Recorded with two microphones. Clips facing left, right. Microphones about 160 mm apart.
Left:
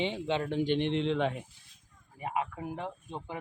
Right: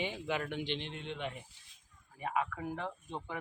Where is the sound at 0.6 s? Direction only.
55° left (ahead or behind); by 1.4 s 90° left.